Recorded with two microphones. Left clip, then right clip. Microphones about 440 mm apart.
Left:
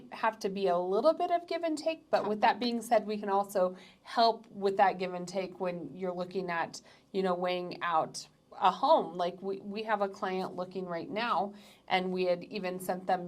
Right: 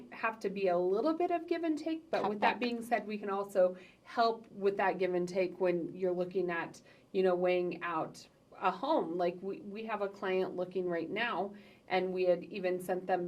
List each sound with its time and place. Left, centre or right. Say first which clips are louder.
0.1 s a woman's voice: left 4 dB; left